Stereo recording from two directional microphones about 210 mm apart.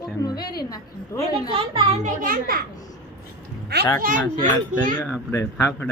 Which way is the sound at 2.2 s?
45° right (ahead or behind).